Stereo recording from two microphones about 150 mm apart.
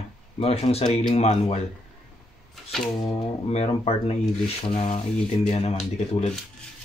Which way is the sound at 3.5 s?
45° left (ahead or behind).